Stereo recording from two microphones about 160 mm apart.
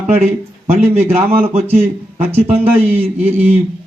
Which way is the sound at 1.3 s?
40° right (ahead or behind).